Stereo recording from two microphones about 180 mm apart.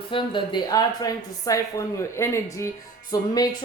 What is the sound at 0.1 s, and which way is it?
Speech, 25° left (ahead or behind).